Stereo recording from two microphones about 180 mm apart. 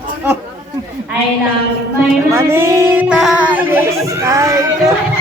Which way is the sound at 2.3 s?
15° right (ahead or behind).